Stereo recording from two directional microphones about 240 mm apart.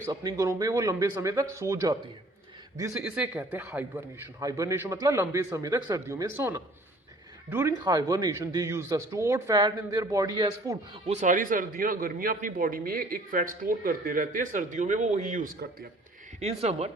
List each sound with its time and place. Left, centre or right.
0.0 s a man's voice: centre; by 15.9 s right
16.4 s speech: right